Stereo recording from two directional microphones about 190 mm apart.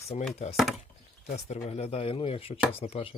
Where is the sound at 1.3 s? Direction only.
35° left (ahead or behind).